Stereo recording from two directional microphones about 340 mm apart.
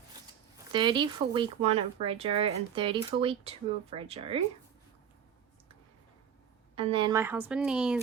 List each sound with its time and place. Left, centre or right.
0.7 s speech: centre
6.7 s a woman's voice: centre